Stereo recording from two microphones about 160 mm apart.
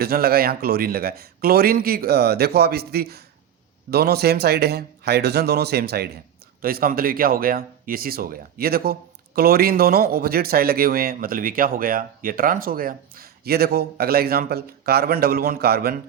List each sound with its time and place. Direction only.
0.0 s speech: 75° right (ahead or behind)
6.6 s speech: 65° right (ahead or behind)